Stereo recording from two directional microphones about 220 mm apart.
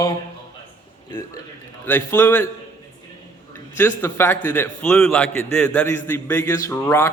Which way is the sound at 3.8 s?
10° left (ahead or behind).